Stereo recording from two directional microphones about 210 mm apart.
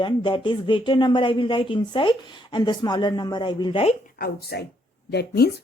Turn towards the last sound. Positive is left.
turn(degrees=50)  # may be behind; listen again after turning